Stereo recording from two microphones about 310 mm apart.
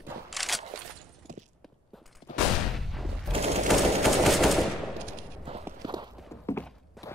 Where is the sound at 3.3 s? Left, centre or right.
Centre.